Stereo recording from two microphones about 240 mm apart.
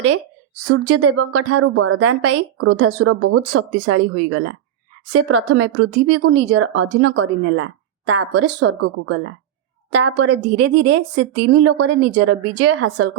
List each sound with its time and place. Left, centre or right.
0.7 s a woman's voice: right